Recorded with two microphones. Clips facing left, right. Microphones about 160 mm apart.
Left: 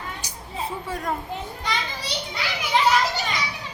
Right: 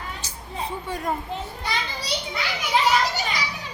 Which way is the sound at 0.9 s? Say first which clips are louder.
Right 2 dB; centre (ahead or behind).